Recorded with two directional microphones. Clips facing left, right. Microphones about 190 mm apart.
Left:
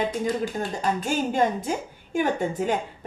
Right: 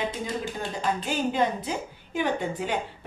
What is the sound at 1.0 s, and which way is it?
A woman's voice, 45° left (ahead or behind).